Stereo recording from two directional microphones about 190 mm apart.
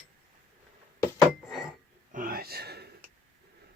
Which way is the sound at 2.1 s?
50° right (ahead or behind).